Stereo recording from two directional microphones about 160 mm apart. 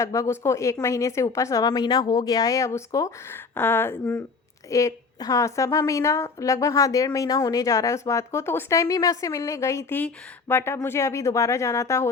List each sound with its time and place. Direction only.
0.0 s a woman's voice: 20° left (ahead or behind)